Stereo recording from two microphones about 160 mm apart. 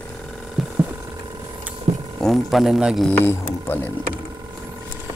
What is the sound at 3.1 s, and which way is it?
Speech, 10° left (ahead or behind).